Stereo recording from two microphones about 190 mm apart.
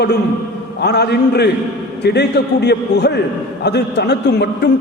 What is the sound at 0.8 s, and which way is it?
A man's voice, 60° left (ahead or behind).